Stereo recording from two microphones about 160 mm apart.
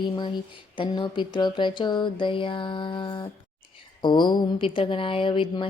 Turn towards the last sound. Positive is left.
turn(degrees=30)  # may be behind; listen again after turning